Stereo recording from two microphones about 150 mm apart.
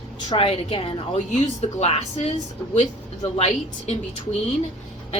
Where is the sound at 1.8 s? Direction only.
45° left (ahead or behind).